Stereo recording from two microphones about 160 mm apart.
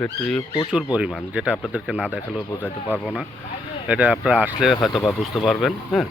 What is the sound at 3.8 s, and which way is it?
Speech, 5° right (ahead or behind).